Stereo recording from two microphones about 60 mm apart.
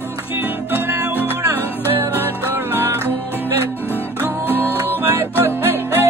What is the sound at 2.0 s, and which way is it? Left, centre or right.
Music, right.